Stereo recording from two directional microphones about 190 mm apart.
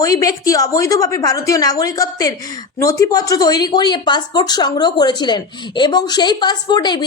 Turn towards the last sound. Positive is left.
turn(degrees=25)  # may be behind; listen again after turning